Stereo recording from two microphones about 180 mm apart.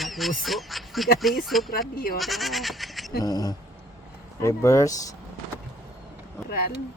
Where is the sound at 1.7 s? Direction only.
55° left (ahead or behind).